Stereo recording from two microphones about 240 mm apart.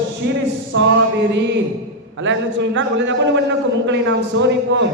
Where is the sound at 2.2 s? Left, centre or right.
Right.